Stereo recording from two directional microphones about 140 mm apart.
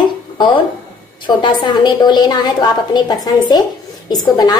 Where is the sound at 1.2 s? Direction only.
35° left (ahead or behind).